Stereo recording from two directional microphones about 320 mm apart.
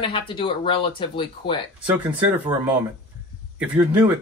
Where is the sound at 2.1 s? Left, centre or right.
Centre.